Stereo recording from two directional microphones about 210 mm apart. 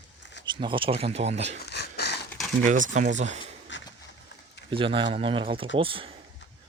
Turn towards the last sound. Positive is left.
turn(degrees=-25)  # may be behind; listen again after turning